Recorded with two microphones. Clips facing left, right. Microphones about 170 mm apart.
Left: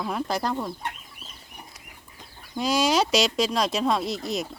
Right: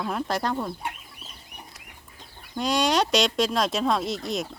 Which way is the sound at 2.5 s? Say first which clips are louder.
Left 1 dB; centre (ahead or behind).